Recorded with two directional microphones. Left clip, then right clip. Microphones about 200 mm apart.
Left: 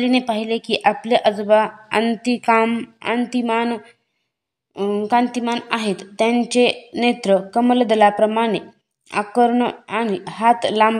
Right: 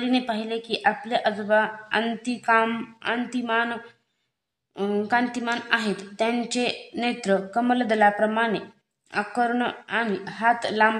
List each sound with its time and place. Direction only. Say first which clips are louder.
0.3 s a woman's voice: left 7 dB; 30° left (ahead or behind)